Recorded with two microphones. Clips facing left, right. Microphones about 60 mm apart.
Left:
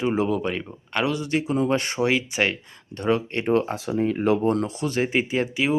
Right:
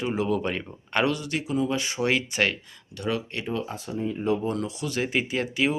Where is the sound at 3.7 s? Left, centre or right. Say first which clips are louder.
Left 6 dB; left.